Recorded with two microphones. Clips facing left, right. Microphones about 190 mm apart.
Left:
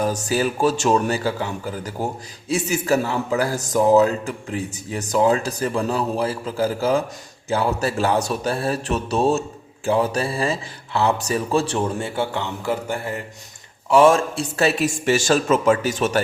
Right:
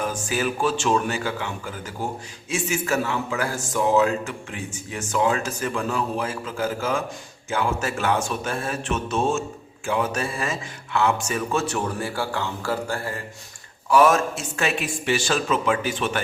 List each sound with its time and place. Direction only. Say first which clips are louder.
0.0 s a man's voice: left 4 dB; 35° left (ahead or behind)